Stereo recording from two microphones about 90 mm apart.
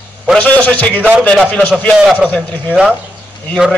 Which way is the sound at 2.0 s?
10° right (ahead or behind).